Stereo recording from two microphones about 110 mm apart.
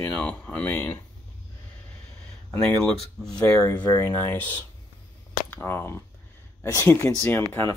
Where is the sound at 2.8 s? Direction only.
5° left (ahead or behind).